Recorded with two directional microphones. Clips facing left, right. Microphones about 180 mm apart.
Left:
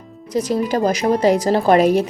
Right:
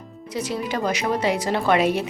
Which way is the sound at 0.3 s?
40° left (ahead or behind).